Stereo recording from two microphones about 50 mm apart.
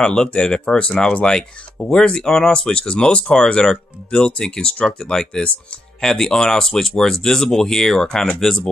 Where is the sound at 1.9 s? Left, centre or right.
Centre.